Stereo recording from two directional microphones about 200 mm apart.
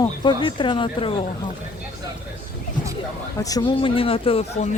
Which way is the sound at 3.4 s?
20° left (ahead or behind).